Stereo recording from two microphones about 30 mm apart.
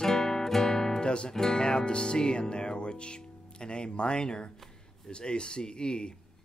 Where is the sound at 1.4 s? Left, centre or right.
Left.